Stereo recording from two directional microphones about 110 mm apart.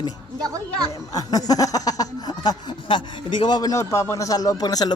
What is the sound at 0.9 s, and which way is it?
Speech, 30° left (ahead or behind).